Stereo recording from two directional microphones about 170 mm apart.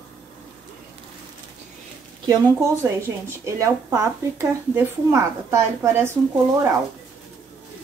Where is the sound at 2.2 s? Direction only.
20° right (ahead or behind).